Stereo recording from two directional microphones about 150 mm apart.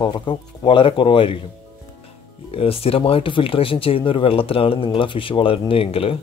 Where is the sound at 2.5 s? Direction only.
40° left (ahead or behind).